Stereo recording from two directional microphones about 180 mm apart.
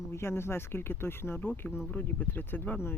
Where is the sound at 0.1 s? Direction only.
15° left (ahead or behind).